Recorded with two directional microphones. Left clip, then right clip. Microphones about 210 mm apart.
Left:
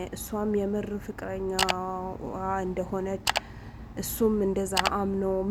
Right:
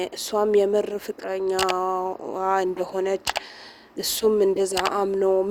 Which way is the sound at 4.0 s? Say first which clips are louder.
Right 6 dB; 40° right (ahead or behind).